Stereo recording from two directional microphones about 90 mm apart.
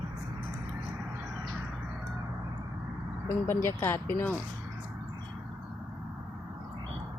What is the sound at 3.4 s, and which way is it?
Speech, 25° left (ahead or behind).